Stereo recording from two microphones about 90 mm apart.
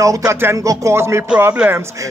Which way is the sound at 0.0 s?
40° right (ahead or behind).